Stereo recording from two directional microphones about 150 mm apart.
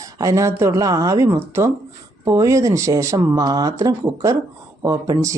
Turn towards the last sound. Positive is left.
turn(degrees=-20)  # may be behind; listen again after turning